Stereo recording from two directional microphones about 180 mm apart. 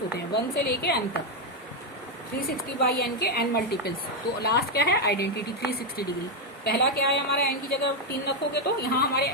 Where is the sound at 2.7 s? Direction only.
55° left (ahead or behind).